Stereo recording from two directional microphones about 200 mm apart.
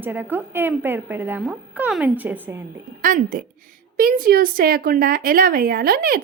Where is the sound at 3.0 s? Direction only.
40° right (ahead or behind).